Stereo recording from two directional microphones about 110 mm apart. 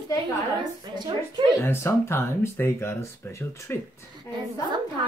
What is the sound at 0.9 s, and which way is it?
Speech, 45° right (ahead or behind).